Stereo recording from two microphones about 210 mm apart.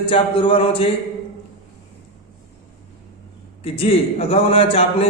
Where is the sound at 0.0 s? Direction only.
25° left (ahead or behind).